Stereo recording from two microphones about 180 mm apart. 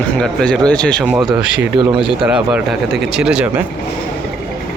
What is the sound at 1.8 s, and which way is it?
Speech, 25° right (ahead or behind).